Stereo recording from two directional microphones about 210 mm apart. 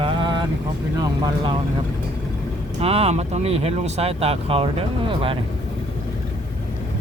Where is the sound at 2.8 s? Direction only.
30° right (ahead or behind).